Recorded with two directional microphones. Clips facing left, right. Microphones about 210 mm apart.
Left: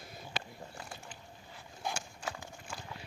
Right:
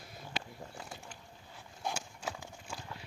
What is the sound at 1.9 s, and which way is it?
Horse, 5° right (ahead or behind).